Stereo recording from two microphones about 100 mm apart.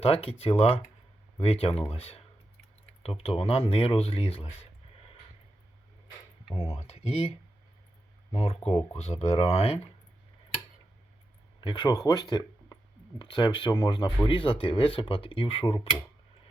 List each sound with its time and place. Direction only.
0.0 s speech: 70° left (ahead or behind)
6.4 s a sound: 70° left (ahead or behind)
6.7 s speech: 90° left
11.6 s speech: 50° left (ahead or behind); by 15.9 s 70° left (ahead or behind)